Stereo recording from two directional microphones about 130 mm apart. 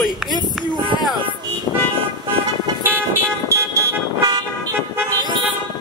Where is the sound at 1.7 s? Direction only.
30° left (ahead or behind).